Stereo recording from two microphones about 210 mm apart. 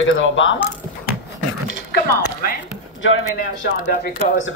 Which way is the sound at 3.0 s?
60° left (ahead or behind).